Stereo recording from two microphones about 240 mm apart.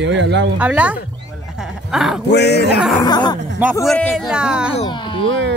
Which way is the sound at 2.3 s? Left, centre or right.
Left.